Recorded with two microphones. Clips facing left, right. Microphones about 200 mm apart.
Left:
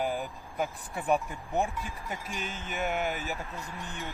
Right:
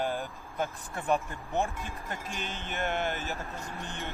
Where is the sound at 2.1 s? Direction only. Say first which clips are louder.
Left 1 dB; centre (ahead or behind).